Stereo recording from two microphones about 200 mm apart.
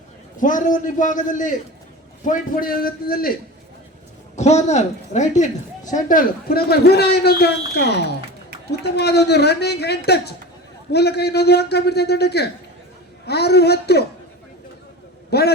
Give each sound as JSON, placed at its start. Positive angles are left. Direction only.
{"t": 0.3, "sound": "a man's voice", "side_deg": 40}
{"t": 4.4, "sound": "a man's voice", "side_deg": 35}
{"t": 15.3, "sound": "a man's voice", "side_deg": 55}